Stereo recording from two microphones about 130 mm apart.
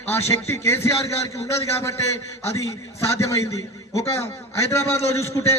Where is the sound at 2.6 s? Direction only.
25° left (ahead or behind).